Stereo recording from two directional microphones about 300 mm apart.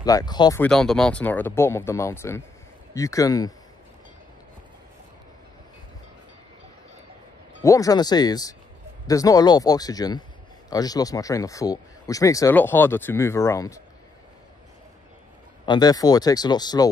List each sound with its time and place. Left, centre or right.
0.0 s speech: centre
7.6 s speech: centre
15.6 s speech: centre